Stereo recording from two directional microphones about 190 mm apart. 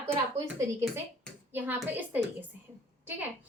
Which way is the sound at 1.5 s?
10° right (ahead or behind).